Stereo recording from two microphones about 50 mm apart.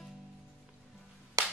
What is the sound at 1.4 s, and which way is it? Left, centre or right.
Clapping, right.